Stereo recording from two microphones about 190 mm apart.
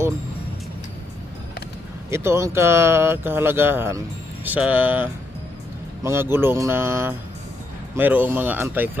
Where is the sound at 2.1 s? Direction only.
15° right (ahead or behind).